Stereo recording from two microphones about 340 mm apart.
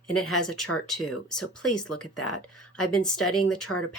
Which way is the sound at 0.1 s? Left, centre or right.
Left.